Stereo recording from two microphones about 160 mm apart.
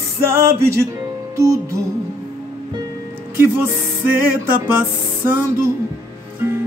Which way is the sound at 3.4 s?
15° right (ahead or behind).